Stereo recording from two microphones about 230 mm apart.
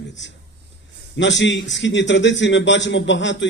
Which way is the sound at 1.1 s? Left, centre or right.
Left.